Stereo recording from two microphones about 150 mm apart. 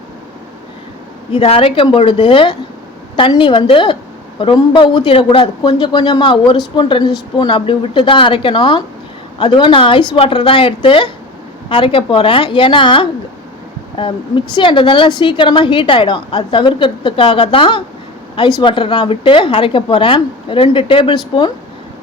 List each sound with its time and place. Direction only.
1.3 s a woman's voice: 35° left (ahead or behind)